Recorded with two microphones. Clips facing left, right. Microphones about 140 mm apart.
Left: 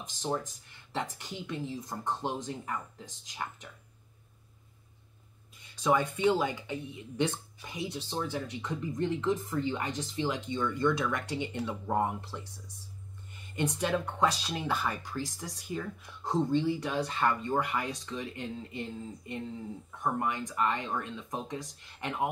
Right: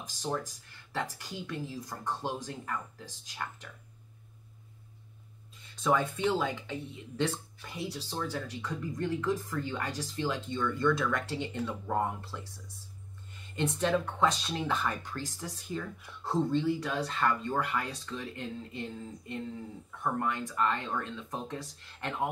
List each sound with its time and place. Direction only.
0.0 s speech: 20° left (ahead or behind)
5.8 s speech: 15° left (ahead or behind)